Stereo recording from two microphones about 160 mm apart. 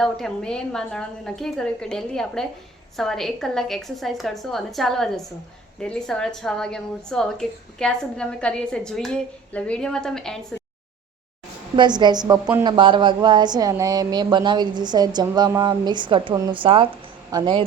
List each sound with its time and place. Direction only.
0.0 s a woman's voice: 5° left (ahead or behind)
11.8 s speech: 25° right (ahead or behind)